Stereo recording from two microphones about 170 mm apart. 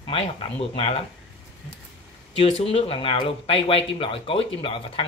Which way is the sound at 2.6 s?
35° left (ahead or behind).